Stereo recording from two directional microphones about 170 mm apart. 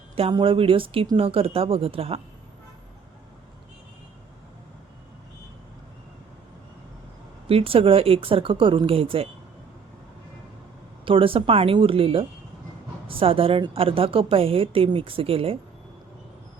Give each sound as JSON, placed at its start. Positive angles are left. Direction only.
{"t": 0.2, "sound": "a woman's voice", "side_deg": -30}
{"t": 7.4, "sound": "a woman's voice", "side_deg": -35}
{"t": 11.0, "sound": "a woman's voice", "side_deg": -30}